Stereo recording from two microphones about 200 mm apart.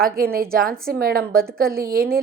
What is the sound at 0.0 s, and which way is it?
A woman's voice, 45° right (ahead or behind).